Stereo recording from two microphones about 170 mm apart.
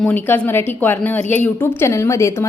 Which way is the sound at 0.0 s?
10° left (ahead or behind).